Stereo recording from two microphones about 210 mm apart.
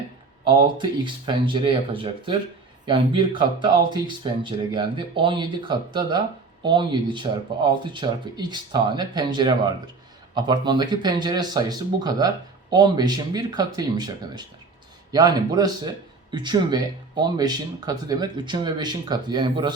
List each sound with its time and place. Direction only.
0.4 s speech: 20° right (ahead or behind)